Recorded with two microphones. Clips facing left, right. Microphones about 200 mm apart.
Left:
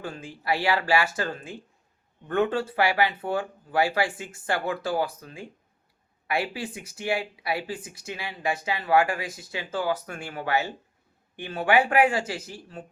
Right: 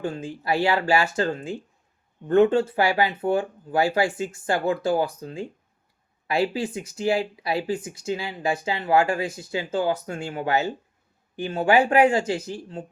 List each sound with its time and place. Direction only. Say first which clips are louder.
0.0 s speech: right 6 dB; 25° right (ahead or behind)